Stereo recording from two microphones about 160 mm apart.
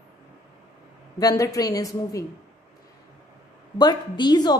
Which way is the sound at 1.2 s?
20° left (ahead or behind).